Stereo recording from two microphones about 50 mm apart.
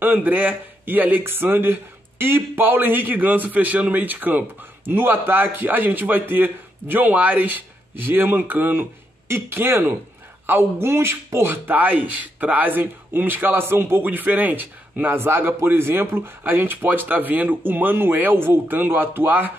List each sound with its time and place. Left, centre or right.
0.0 s speech: right
15.1 s speech: right